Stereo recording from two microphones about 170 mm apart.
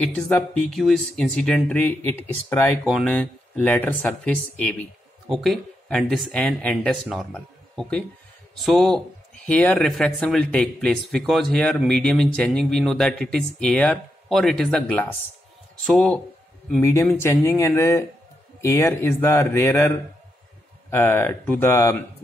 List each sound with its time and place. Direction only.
0.0 s speech: 5° left (ahead or behind)
16.8 s speech: 15° left (ahead or behind)
20.9 s speech: 15° left (ahead or behind)